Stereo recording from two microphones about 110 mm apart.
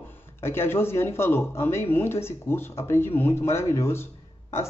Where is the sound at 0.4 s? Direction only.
20° left (ahead or behind).